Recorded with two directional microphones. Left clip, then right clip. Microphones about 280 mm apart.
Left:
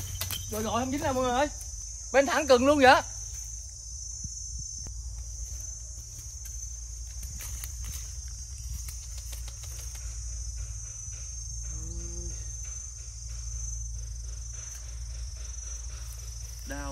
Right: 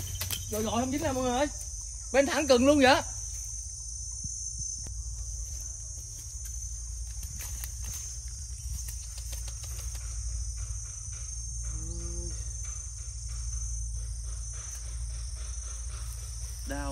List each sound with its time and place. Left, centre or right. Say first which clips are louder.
0.2 s speech: even; centre
16.6 s cricket: right 2 dB; centre